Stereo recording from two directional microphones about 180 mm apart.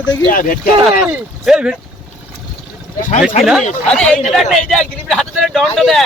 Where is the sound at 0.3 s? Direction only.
50° left (ahead or behind).